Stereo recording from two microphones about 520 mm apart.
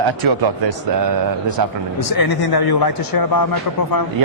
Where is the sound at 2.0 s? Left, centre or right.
Left.